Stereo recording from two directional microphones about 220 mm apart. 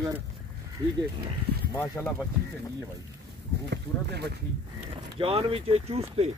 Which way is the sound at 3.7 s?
50° right (ahead or behind).